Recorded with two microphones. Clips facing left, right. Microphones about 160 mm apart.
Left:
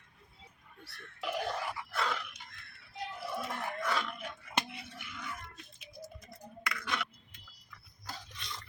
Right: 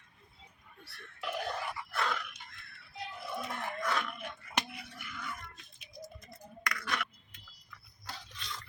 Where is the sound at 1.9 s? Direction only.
10° left (ahead or behind).